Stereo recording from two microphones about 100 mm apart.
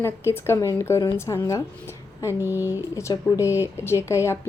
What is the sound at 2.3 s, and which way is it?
Speech, 25° right (ahead or behind).